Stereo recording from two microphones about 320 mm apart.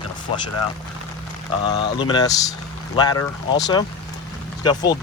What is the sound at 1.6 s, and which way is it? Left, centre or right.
Speech, centre.